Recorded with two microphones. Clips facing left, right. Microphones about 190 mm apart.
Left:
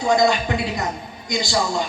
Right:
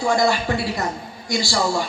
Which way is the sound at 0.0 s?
20° left (ahead or behind).